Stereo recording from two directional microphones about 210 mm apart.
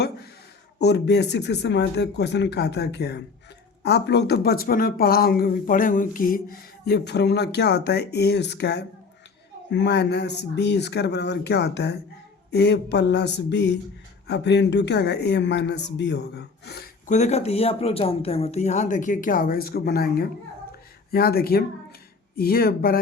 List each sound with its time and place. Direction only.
0.8 s speech: 55° left (ahead or behind)